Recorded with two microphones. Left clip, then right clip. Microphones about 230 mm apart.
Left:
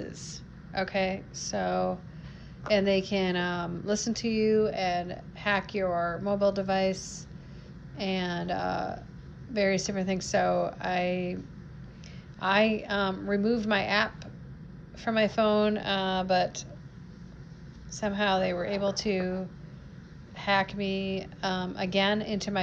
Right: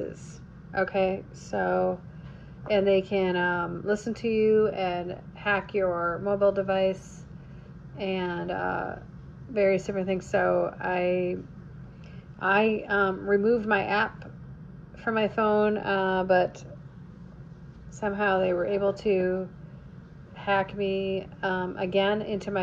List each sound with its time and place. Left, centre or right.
0.0 s speech: centre
8.0 s speech: centre
12.4 s speech: centre
15.0 s speech: centre
18.0 s speech: centre
20.4 s speech: centre